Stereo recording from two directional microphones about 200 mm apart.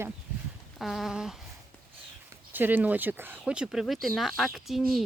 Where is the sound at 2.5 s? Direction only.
10° right (ahead or behind).